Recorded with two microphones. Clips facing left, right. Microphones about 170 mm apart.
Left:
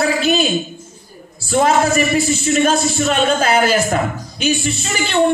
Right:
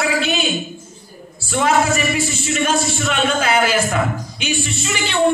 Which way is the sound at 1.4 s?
40° left (ahead or behind).